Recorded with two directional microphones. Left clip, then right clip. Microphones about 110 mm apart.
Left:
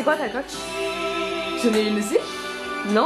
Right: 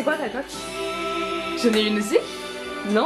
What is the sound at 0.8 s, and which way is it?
Music, 15° left (ahead or behind).